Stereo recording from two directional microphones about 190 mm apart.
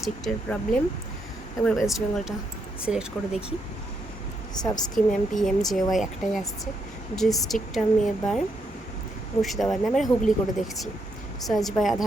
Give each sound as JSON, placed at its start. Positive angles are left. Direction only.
{"t": 0.0, "sound": "speech", "side_deg": 5}
{"t": 4.6, "sound": "speech", "side_deg": 20}
{"t": 4.9, "sound": "speech", "side_deg": 0}
{"t": 11.4, "sound": "speech", "side_deg": 0}